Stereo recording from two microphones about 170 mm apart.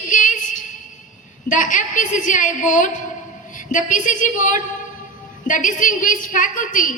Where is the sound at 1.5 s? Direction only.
50° left (ahead or behind).